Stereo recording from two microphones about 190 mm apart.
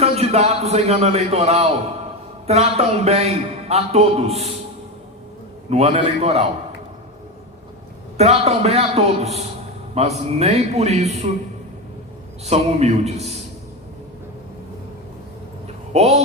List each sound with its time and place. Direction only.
0.0 s a man's voice: 35° right (ahead or behind)
5.7 s a man's voice: 30° right (ahead or behind)
8.2 s a man's voice: 35° right (ahead or behind)
12.5 s a man's voice: 35° right (ahead or behind)
15.9 s a man's voice: 35° right (ahead or behind)